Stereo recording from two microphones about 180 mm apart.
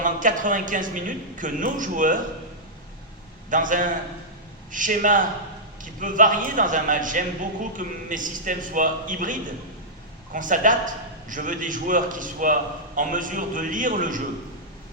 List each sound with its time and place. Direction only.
0.0 s a man's voice: 45° right (ahead or behind)
3.5 s a man's voice: 45° right (ahead or behind)